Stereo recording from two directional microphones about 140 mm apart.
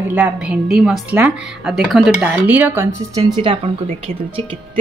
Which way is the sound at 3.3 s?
35° right (ahead or behind).